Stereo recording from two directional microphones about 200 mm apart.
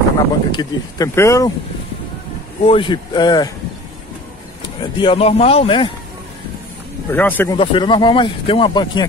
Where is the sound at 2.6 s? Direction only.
25° left (ahead or behind).